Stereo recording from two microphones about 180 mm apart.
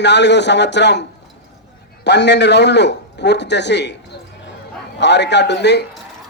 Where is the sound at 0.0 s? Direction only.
75° left (ahead or behind).